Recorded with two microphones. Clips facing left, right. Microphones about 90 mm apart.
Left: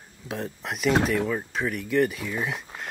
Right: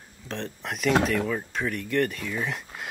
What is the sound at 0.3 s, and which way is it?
Speech, 5° left (ahead or behind).